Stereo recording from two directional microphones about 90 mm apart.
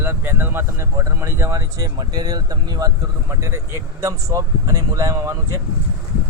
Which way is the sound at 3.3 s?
30° right (ahead or behind).